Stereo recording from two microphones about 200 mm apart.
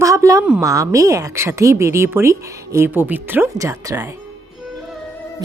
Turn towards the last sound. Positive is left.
turn(degrees=-15)  # may be behind; listen again after turning